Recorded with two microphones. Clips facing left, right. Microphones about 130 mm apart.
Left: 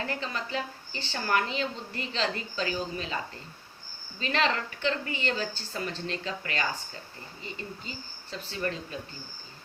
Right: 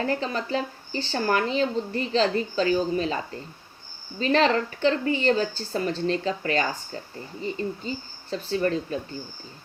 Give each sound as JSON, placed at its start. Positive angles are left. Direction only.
{"t": 0.0, "sound": "speech", "side_deg": -35}
{"t": 4.2, "sound": "speech", "side_deg": -40}